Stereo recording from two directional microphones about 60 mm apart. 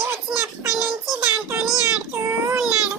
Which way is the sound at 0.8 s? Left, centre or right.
Centre.